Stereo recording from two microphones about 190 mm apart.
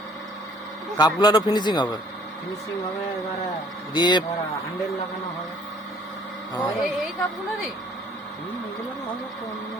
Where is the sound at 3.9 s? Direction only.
25° left (ahead or behind).